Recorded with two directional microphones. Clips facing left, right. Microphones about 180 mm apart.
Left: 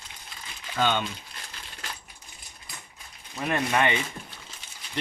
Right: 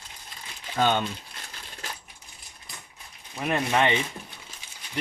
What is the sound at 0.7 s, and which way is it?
Speech, 40° right (ahead or behind).